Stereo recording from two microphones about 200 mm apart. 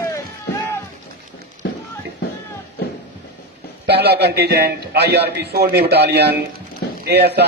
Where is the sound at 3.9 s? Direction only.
55° right (ahead or behind).